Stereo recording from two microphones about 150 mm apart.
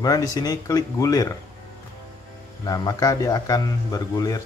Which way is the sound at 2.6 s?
25° left (ahead or behind).